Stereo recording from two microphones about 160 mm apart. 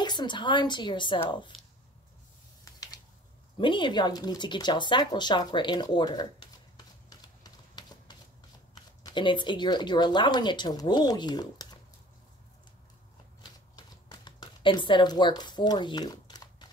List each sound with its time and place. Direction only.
0.0 s speech: 30° left (ahead or behind)
3.5 s speech: 30° left (ahead or behind)
7.1 s a sound: 25° left (ahead or behind)
8.7 s speech: 30° left (ahead or behind)
13.4 s shuffling cards: 25° left (ahead or behind)